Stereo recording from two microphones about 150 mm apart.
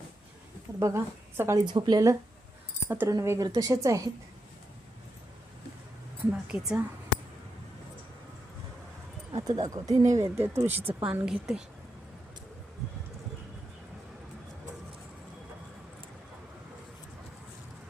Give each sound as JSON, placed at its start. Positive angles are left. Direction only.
{"t": 0.8, "sound": "a woman's voice", "side_deg": -20}
{"t": 1.6, "sound": "a woman's voice", "side_deg": -30}
{"t": 6.5, "sound": "speech", "side_deg": -5}
{"t": 9.3, "sound": "speech", "side_deg": -50}
{"t": 9.6, "sound": "a woman's voice", "side_deg": -25}